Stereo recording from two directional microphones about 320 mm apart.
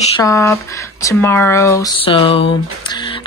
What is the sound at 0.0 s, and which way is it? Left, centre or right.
Speech, centre.